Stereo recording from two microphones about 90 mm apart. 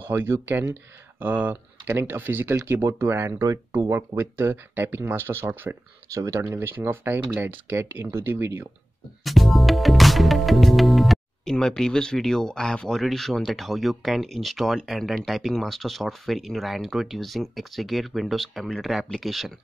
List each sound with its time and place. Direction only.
0.0 s speech: 25° right (ahead or behind)
6.1 s speech: 35° right (ahead or behind)
6.4 s speech: 25° right (ahead or behind)
9.2 s music: centre (ahead or behind)
11.5 s speech: 5° left (ahead or behind)